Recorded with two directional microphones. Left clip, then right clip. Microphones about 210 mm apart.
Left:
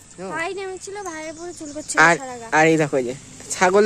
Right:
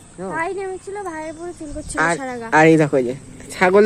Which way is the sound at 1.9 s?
40° left (ahead or behind).